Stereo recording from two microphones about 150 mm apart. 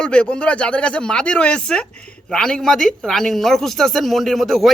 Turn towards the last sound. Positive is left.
turn(degrees=0)  # may be behind; listen again after turning